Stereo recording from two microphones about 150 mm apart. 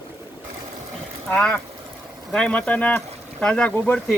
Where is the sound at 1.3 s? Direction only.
5° left (ahead or behind).